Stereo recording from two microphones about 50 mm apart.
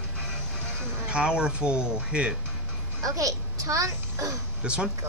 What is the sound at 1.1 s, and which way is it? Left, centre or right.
Speech, centre.